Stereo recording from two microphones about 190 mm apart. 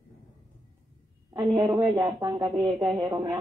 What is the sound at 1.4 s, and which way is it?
Speech, 20° right (ahead or behind).